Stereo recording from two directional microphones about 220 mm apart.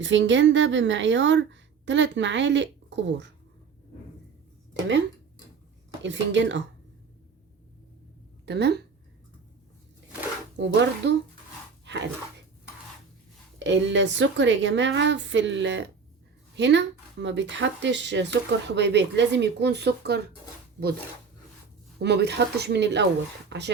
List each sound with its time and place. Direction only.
0.0 s a woman's voice: 55° right (ahead or behind)
4.7 s a woman's voice: 55° right (ahead or behind)
8.4 s speech: 50° right (ahead or behind)
10.6 s speech: 55° right (ahead or behind)
13.7 s a woman's voice: 55° right (ahead or behind)
21.9 s speech: 50° right (ahead or behind)